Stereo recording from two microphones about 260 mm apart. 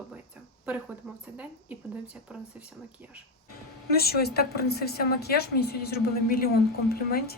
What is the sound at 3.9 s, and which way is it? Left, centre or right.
A woman's voice, left.